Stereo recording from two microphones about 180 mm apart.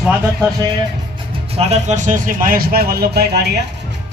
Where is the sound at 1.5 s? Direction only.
40° right (ahead or behind); by 3.5 s 60° right (ahead or behind).